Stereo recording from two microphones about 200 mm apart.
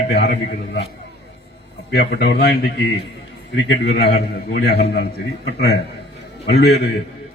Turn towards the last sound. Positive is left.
turn(degrees=55)  # may be behind; listen again after turning